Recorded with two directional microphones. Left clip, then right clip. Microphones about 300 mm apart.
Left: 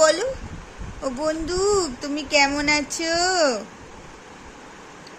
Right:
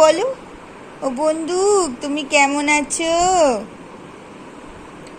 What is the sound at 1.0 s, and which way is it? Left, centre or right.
Speech, centre.